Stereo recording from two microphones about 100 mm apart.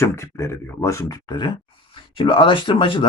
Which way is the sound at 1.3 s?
50° left (ahead or behind).